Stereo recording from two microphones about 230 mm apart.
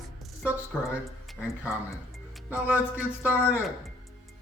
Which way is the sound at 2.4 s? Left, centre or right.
Centre.